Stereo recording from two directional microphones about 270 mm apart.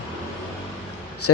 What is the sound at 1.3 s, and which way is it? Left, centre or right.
Speech, left.